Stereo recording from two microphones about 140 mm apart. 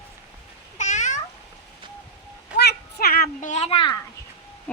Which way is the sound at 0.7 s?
60° left (ahead or behind).